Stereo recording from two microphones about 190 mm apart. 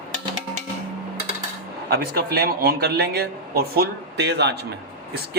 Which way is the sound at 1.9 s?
55° right (ahead or behind).